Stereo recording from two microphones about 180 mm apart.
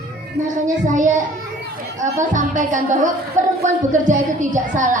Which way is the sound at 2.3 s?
45° right (ahead or behind).